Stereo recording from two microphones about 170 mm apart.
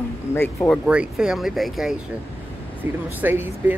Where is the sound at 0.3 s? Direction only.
15° left (ahead or behind).